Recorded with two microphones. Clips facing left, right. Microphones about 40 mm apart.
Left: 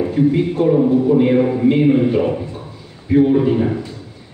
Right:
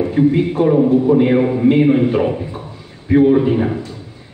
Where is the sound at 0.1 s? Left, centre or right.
Centre.